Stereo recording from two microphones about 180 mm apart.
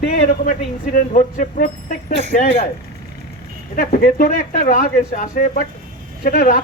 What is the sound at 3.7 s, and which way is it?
Speech, 55° left (ahead or behind).